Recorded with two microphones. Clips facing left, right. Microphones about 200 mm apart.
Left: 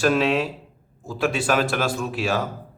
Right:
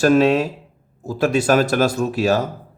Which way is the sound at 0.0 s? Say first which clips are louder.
Right 6 dB; 40° right (ahead or behind).